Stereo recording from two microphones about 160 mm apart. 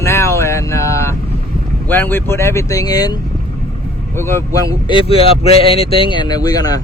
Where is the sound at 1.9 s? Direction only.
10° left (ahead or behind).